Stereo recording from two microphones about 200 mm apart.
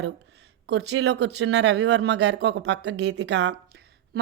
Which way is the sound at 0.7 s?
60° right (ahead or behind).